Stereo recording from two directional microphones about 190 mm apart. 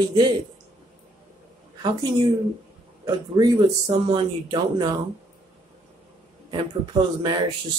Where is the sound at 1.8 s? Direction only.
25° right (ahead or behind).